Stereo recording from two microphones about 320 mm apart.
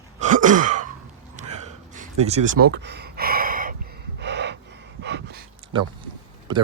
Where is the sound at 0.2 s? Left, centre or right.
Right.